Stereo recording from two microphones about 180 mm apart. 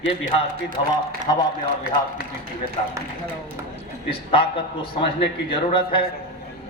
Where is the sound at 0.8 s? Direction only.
30° left (ahead or behind).